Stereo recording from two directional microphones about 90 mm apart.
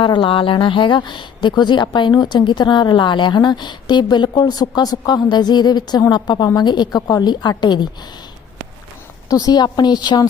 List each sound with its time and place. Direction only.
0.0 s a woman's voice: 65° left (ahead or behind)
9.3 s a woman's voice: 50° left (ahead or behind)